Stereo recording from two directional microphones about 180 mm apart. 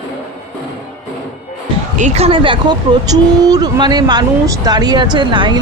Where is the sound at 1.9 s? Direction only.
40° right (ahead or behind).